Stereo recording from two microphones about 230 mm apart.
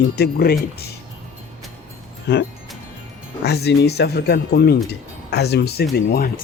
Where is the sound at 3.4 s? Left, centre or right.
Left.